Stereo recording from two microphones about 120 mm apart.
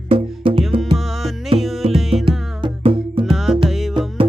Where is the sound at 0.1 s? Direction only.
50° right (ahead or behind).